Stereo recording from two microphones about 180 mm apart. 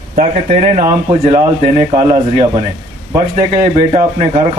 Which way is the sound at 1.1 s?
35° right (ahead or behind).